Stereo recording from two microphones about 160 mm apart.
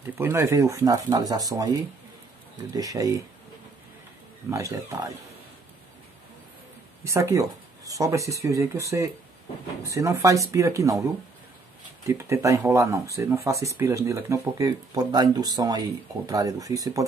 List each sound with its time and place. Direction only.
0.0 s speech: 15° right (ahead or behind)
2.7 s speech: 20° right (ahead or behind)
4.5 s speech: 20° right (ahead or behind)
7.1 s speech: 20° right (ahead or behind)
9.8 s speech: 20° right (ahead or behind)
12.1 s speech: 20° right (ahead or behind)